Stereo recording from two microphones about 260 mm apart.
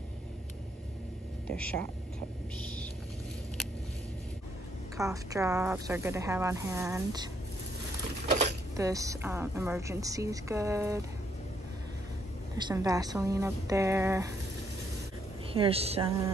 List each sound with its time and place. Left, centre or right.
1.5 s speech: centre
4.9 s a woman's voice: centre
8.7 s a woman's voice: centre
12.5 s a woman's voice: centre
15.5 s a woman's voice: right